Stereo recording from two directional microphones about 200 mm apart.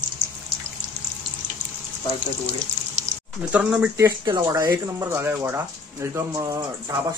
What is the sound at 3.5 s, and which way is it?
Speech, 5° right (ahead or behind).